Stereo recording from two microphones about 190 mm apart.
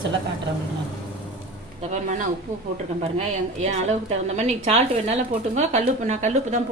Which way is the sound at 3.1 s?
35° right (ahead or behind).